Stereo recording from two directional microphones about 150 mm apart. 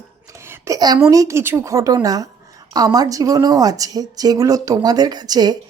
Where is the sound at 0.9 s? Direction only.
20° right (ahead or behind).